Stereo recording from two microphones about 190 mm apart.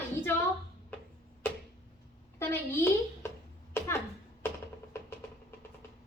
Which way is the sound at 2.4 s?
10° left (ahead or behind).